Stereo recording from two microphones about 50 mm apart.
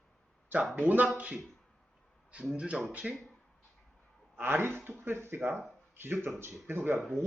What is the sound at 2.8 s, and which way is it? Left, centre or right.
Speech, right.